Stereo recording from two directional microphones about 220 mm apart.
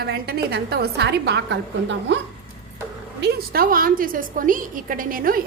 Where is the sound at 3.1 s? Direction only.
45° right (ahead or behind).